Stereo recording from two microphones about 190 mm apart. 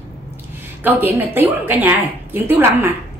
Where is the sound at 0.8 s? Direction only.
10° right (ahead or behind).